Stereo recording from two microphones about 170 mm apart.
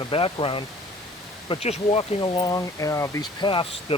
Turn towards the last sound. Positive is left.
turn(degrees=30)  # may be behind; listen again after turning